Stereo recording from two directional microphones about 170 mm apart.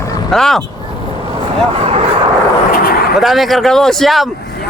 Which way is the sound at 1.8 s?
35° right (ahead or behind).